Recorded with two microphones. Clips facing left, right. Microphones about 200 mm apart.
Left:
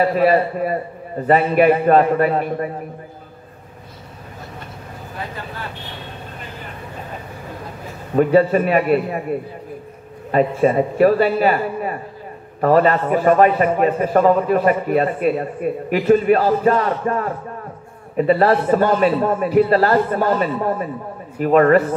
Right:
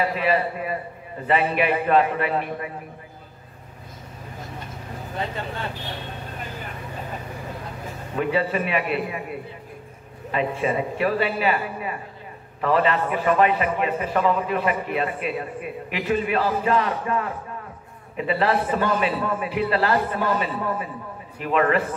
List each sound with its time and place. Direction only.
0.0 s a man's voice: 45° left (ahead or behind)
8.2 s a man's voice: 45° left (ahead or behind)